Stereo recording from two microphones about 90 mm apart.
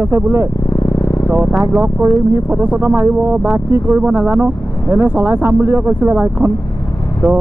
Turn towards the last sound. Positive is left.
turn(degrees=-25)  # may be behind; listen again after turning